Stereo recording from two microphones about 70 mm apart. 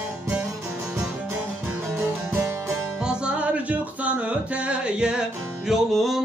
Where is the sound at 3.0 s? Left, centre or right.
Centre.